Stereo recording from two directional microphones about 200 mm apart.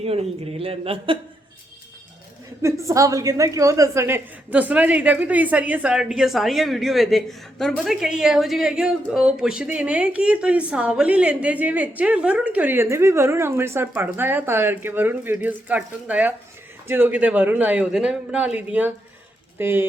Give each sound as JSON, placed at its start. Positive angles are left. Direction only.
{"t": 0.0, "sound": "speech", "side_deg": -30}
{"t": 2.6, "sound": "a woman's voice", "side_deg": -15}